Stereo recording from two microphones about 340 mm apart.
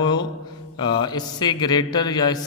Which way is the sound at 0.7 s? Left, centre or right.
Centre.